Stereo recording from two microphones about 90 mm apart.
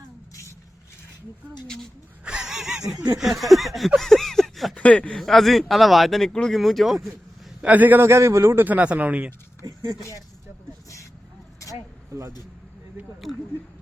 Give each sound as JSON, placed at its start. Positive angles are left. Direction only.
{"t": 1.6, "sound": "speech", "side_deg": 5}
{"t": 2.2, "sound": "a sound", "side_deg": -10}
{"t": 3.2, "sound": "speech", "side_deg": 0}
{"t": 4.8, "sound": "speech", "side_deg": 15}
{"t": 5.2, "sound": "speech", "side_deg": 0}
{"t": 7.6, "sound": "a man's voice", "side_deg": -20}
{"t": 9.6, "sound": "speech", "side_deg": -45}
{"t": 12.1, "sound": "speech", "side_deg": -35}